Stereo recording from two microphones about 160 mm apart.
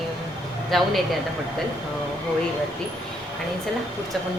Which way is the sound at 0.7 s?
Centre (ahead or behind).